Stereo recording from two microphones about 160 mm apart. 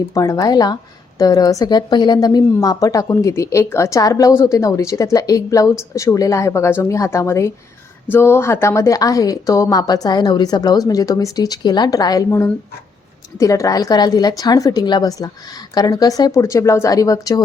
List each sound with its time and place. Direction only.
0.1 s speech: 20° left (ahead or behind)